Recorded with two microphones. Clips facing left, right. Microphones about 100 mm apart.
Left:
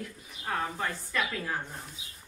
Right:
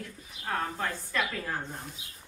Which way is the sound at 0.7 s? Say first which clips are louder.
Even; centre (ahead or behind).